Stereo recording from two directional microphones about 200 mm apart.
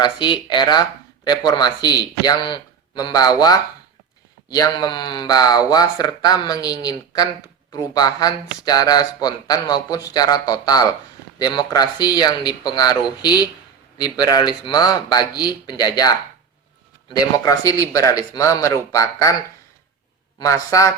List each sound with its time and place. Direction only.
0.0 s speech: 20° left (ahead or behind)
20.4 s speech: 15° left (ahead or behind)